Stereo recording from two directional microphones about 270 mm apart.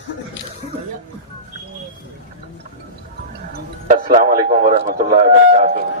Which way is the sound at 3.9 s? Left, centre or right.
Right.